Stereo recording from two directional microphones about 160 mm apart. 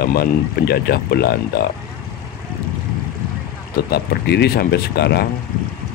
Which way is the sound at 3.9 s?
90° left.